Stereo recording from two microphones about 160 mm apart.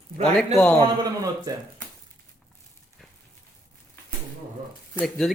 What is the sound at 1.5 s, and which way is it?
Speech, 20° right (ahead or behind).